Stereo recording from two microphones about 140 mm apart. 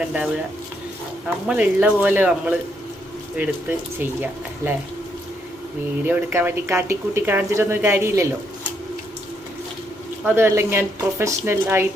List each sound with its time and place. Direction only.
0.0 s speech: 5° right (ahead or behind)
1.5 s speech: 10° right (ahead or behind)
6.1 s speech: 15° right (ahead or behind)
10.2 s speech: 15° right (ahead or behind)